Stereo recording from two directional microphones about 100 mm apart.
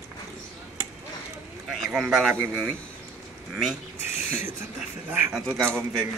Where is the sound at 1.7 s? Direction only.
10° right (ahead or behind).